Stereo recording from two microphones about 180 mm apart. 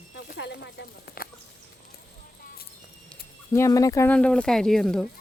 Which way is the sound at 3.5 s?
15° left (ahead or behind).